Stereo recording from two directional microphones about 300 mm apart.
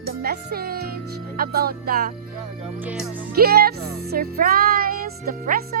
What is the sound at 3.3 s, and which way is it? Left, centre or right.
Music, right.